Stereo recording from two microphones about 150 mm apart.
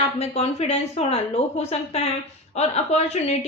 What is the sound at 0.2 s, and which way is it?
A woman's voice, 45° left (ahead or behind).